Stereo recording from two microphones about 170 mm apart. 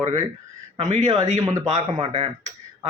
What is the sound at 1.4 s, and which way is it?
Speech, 20° right (ahead or behind).